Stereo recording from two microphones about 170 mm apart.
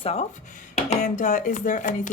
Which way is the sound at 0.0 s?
40° left (ahead or behind).